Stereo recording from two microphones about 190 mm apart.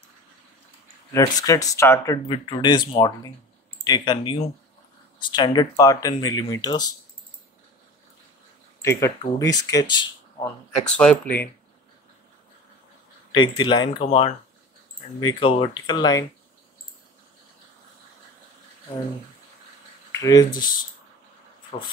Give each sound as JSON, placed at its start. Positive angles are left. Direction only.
{"t": 1.1, "sound": "speech", "side_deg": 20}
{"t": 2.2, "sound": "speech", "side_deg": 25}
{"t": 8.8, "sound": "speech", "side_deg": 15}
{"t": 10.4, "sound": "speech", "side_deg": 5}
{"t": 13.3, "sound": "speech", "side_deg": 25}
{"t": 20.1, "sound": "speech", "side_deg": 20}